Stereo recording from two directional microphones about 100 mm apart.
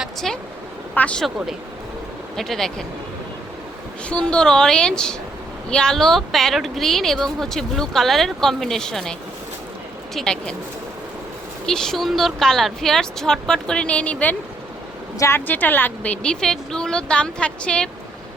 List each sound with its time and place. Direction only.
0.0 s vehicle: 5° left (ahead or behind)
0.9 s speech: 15° left (ahead or behind)
2.3 s a woman's voice: 5° left (ahead or behind)
4.1 s a woman's voice: 10° left (ahead or behind)
10.2 s speech: 10° left (ahead or behind)
11.6 s a woman's voice: 5° left (ahead or behind)
15.4 s speech: 20° left (ahead or behind)
16.2 s speech: 5° left (ahead or behind)